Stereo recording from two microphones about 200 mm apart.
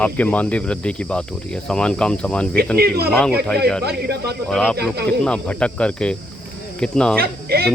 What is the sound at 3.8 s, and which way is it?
Speech, 55° right (ahead or behind).